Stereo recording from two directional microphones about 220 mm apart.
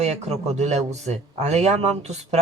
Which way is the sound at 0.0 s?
30° right (ahead or behind).